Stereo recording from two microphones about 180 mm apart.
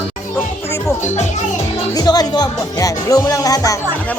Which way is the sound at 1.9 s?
20° left (ahead or behind).